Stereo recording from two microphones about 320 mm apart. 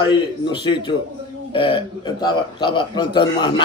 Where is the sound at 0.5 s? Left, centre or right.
Centre.